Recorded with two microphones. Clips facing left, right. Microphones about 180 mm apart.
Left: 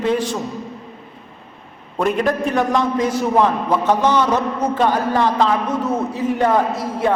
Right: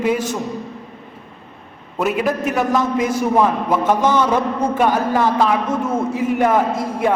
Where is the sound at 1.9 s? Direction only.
5° right (ahead or behind).